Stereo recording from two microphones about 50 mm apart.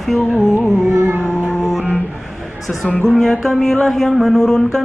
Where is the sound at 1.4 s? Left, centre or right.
Centre.